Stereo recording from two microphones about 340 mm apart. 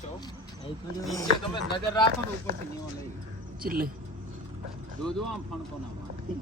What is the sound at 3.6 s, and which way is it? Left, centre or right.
Speech, right.